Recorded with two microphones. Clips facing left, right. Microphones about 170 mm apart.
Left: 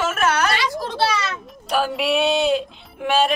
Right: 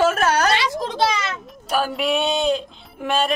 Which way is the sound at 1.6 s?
Centre (ahead or behind).